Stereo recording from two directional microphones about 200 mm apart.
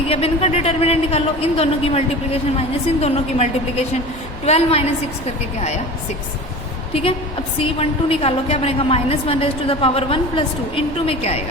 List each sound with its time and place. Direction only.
0.1 s a woman's voice: 30° left (ahead or behind)
6.9 s a woman's voice: 25° left (ahead or behind)